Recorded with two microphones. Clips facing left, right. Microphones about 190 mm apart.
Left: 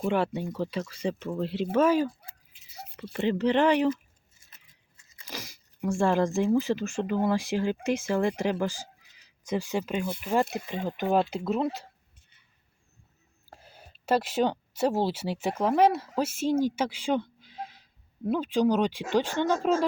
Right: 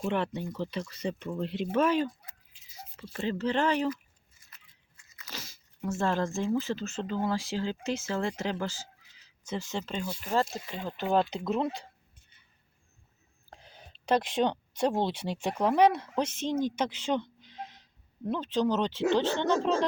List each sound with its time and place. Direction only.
0.0 s speech: 5° left (ahead or behind)
2.5 s drip: 65° left (ahead or behind)
3.2 s speech: 15° left (ahead or behind)
4.9 s crunch: 30° left (ahead or behind)
5.3 s speech: 15° left (ahead or behind)
13.5 s speech: 5° left (ahead or behind)